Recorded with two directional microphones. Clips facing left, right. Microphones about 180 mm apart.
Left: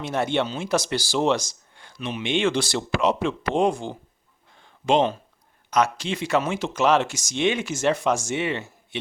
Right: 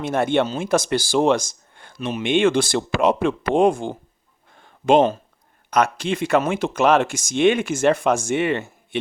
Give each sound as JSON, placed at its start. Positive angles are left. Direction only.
{"t": 0.0, "sound": "speech", "side_deg": -50}
{"t": 4.5, "sound": "a sound", "side_deg": -50}
{"t": 5.7, "sound": "speech", "side_deg": -55}